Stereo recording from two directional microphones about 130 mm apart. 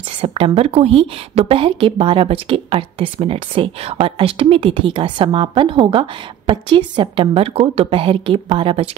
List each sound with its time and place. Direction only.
0.2 s a woman's voice: 45° right (ahead or behind)